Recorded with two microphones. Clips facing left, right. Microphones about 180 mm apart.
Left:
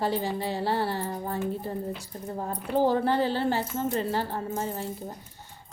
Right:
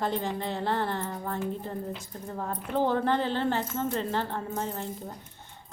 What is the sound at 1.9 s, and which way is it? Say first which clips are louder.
Speech: left 2 dB; 25° left (ahead or behind).